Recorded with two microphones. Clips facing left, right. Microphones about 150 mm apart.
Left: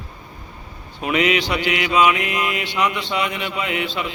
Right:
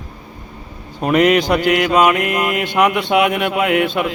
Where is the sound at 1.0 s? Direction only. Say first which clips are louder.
Right 6 dB; 50° right (ahead or behind).